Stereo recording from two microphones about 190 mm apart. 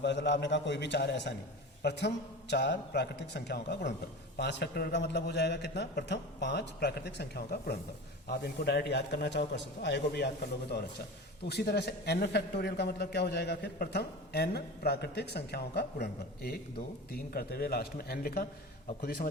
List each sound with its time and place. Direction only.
0.0 s a man's voice: 65° left (ahead or behind); by 19.3 s 50° left (ahead or behind)